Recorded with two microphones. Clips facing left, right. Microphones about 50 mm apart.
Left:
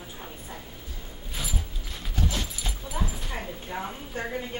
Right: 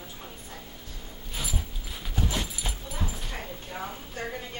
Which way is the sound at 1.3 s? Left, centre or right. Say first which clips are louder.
Even; centre.